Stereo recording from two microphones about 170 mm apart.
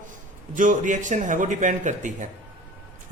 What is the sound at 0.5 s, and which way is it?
Speech, 50° right (ahead or behind).